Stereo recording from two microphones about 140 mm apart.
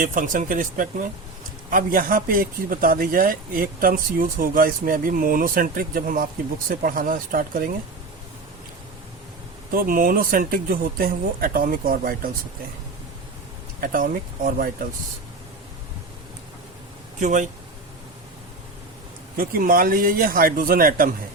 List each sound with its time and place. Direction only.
0.0 s speech: 75° right (ahead or behind)
1.7 s a man's voice: 85° right
9.7 s speech: 90° right
13.8 s a man's voice: 80° right
17.2 s speech: 60° right (ahead or behind)
19.4 s speech: 90° right